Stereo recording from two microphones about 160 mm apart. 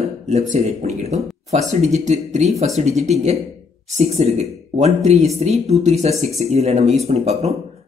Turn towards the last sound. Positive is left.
turn(degrees=-40)  # may be behind; listen again after turning